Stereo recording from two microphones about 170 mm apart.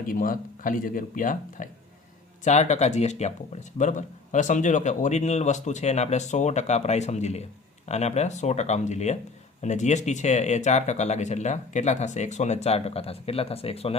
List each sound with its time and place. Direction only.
0.1 s speech: 55° left (ahead or behind); by 13.9 s 35° left (ahead or behind)